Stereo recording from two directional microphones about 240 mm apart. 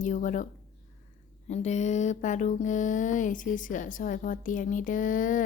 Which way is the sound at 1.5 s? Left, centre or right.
Left.